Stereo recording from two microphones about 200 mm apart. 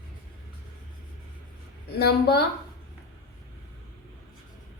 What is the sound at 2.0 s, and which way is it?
Speech, 50° left (ahead or behind).